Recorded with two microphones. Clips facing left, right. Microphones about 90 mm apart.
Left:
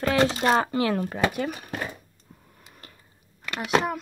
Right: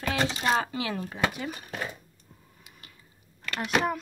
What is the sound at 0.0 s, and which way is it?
Speech, 45° left (ahead or behind).